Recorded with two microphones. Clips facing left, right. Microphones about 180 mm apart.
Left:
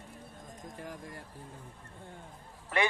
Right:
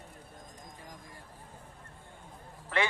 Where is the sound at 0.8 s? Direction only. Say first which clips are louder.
Left 7 dB; 65° left (ahead or behind).